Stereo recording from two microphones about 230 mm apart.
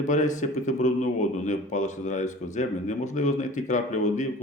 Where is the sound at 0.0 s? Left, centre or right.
Left.